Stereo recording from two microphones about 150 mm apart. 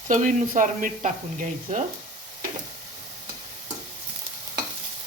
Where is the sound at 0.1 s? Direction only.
60° right (ahead or behind).